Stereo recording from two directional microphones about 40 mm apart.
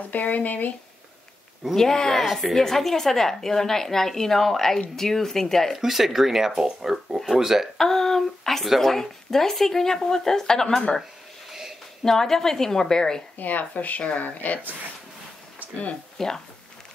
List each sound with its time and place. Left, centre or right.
0.1 s speech: left
1.8 s a woman's voice: centre
2.2 s a woman's voice: centre
5.8 s speech: centre
7.7 s a woman's voice: centre
12.0 s a woman's voice: centre
13.4 s speech: left
16.2 s a woman's voice: centre